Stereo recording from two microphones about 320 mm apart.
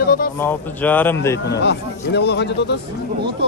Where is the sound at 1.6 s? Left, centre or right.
Left.